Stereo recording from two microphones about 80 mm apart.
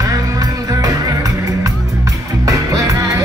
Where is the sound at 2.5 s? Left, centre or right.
Right.